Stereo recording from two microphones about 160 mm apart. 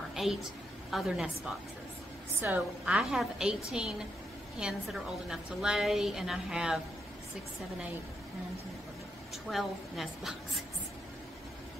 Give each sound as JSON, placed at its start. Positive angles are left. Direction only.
{"t": 0.1, "sound": "a woman's voice", "side_deg": 0}
{"t": 9.5, "sound": "a woman's voice", "side_deg": 0}